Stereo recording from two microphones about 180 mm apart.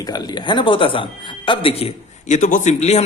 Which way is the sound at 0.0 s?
20° left (ahead or behind).